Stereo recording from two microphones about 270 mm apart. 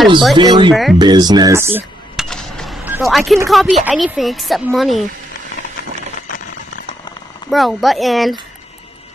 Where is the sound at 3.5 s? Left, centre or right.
Centre.